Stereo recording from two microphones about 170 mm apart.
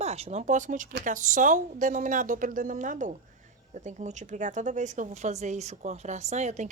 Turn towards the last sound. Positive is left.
turn(degrees=-45)  # may be behind; listen again after turning